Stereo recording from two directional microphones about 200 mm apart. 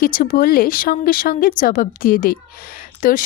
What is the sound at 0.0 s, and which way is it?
Speech, 45° left (ahead or behind).